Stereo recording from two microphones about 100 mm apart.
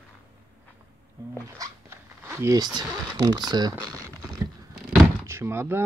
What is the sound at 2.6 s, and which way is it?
Speech, 45° right (ahead or behind).